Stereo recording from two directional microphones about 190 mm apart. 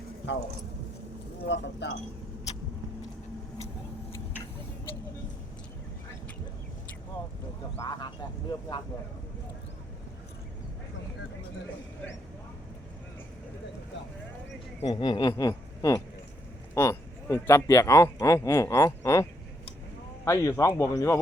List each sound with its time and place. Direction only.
1.5 s speech: 70° left (ahead or behind)
7.8 s speech: 20° left (ahead or behind)
14.8 s speech: 25° left (ahead or behind)